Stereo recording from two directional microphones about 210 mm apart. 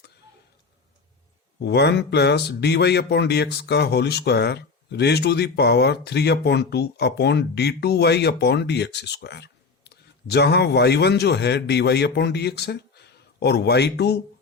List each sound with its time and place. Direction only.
1.5 s speech: 50° left (ahead or behind)